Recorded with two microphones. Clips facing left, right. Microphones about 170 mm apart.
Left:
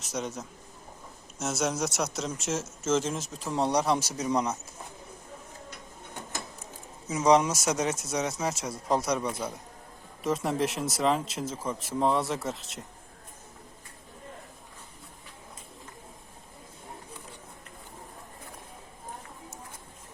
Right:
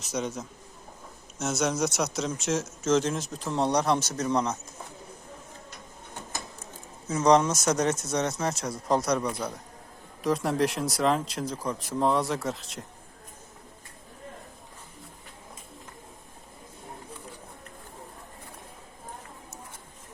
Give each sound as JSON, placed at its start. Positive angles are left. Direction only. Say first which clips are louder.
{"t": 0.0, "sound": "speech", "louder": "right 3 dB", "side_deg": 0}
{"t": 7.1, "sound": "speech", "louder": "right 1 dB", "side_deg": 5}